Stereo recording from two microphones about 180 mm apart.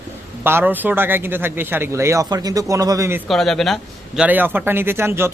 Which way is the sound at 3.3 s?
Centre (ahead or behind).